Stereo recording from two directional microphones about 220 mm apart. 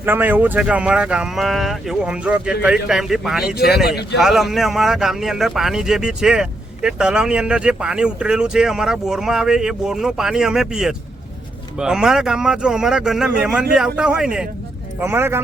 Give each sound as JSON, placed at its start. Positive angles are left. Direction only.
{"t": 0.0, "sound": "speech", "side_deg": -10}
{"t": 3.8, "sound": "speech", "side_deg": 45}
{"t": 4.2, "sound": "speech", "side_deg": 0}